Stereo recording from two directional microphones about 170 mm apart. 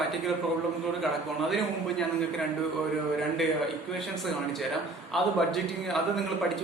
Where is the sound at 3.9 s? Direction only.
Centre (ahead or behind).